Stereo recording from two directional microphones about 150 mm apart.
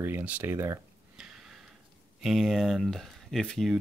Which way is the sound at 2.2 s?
Centre (ahead or behind).